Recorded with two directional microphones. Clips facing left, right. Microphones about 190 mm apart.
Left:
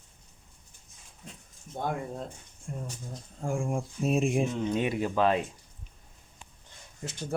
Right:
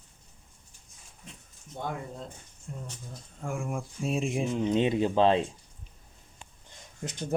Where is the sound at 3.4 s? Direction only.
30° left (ahead or behind).